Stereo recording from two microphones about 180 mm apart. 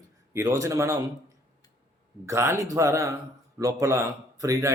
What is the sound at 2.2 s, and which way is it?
A man's voice, 15° right (ahead or behind).